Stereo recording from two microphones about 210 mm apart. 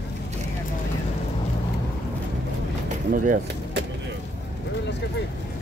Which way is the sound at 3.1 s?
40° right (ahead or behind).